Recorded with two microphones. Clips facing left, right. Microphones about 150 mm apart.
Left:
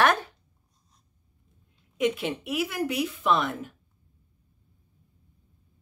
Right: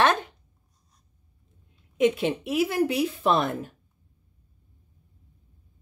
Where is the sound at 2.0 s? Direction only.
25° right (ahead or behind).